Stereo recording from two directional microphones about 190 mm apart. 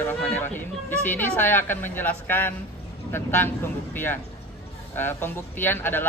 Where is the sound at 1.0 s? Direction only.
10° left (ahead or behind).